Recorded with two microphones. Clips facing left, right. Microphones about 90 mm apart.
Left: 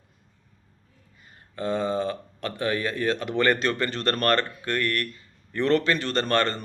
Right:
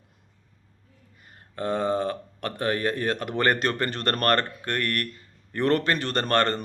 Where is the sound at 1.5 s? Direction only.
55° right (ahead or behind).